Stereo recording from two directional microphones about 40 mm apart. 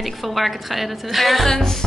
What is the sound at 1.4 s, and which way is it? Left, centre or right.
Music, centre.